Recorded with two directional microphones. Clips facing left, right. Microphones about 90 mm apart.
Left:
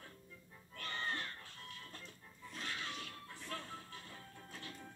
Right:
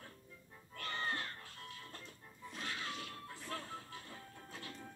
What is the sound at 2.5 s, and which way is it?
Music, 30° right (ahead or behind).